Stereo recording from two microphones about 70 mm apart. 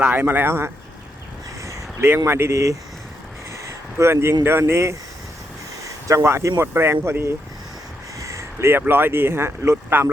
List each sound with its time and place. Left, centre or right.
0.0 s speech: right
1.6 s crow: right
2.0 s speech: right
3.5 s a sound: right
4.4 s speech: right
5.8 s a sound: right
6.6 s speech: right
8.2 s a sound: right
8.9 s speech: right